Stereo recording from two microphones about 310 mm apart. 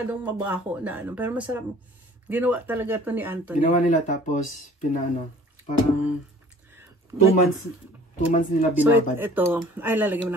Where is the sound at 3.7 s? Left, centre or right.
Left.